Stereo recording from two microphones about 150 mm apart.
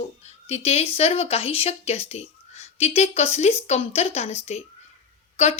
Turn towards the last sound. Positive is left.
turn(degrees=45)  # may be behind; listen again after turning